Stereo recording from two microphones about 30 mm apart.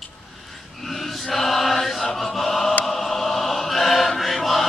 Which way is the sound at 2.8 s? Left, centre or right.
Centre.